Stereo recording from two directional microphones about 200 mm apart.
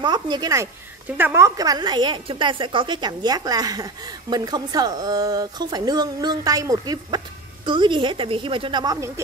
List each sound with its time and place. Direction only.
0.0 s a woman's voice: 20° right (ahead or behind)